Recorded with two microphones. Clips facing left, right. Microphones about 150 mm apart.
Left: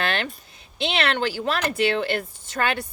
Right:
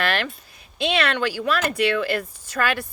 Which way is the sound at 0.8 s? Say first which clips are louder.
Right 1 dB; 25° left (ahead or behind).